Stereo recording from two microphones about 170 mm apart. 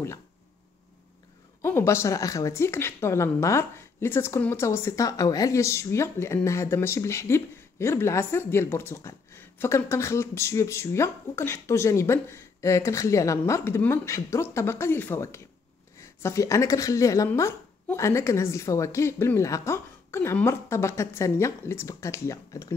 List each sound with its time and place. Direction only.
1.6 s a woman's voice: 15° left (ahead or behind)